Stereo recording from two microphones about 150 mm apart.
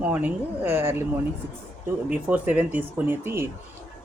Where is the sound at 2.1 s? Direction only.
10° right (ahead or behind).